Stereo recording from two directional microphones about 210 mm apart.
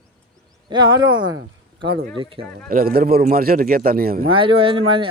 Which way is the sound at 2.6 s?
45° right (ahead or behind).